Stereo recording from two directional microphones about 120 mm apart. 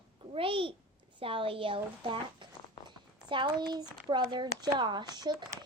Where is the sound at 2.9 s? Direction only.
40° right (ahead or behind).